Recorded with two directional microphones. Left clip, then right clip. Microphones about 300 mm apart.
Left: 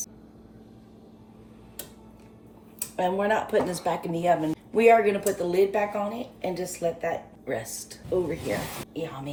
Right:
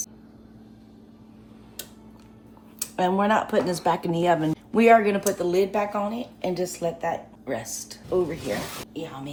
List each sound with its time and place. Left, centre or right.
3.0 s speech: right
9.0 s speech: centre